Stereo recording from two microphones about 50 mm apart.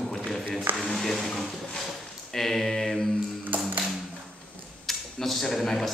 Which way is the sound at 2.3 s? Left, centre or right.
Centre.